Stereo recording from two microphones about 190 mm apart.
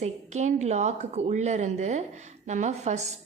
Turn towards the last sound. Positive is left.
turn(degrees=-35)  # may be behind; listen again after turning